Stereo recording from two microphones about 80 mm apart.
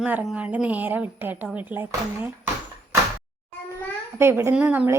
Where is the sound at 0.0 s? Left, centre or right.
Centre.